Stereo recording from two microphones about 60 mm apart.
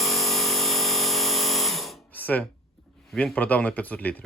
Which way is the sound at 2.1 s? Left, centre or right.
Left.